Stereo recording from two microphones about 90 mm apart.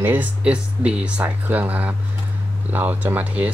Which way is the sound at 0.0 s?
20° right (ahead or behind).